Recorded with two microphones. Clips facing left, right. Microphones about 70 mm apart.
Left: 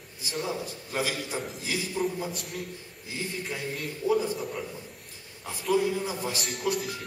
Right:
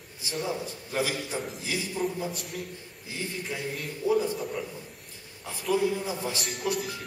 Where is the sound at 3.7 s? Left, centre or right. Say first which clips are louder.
Even; centre.